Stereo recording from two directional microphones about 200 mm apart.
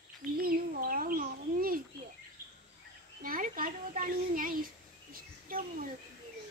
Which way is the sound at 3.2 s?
45° right (ahead or behind).